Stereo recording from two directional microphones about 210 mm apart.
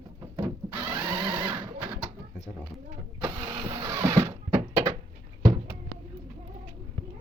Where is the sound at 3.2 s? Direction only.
20° right (ahead or behind).